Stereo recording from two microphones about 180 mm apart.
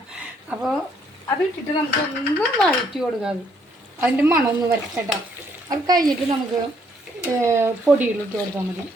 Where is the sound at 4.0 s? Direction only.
15° right (ahead or behind).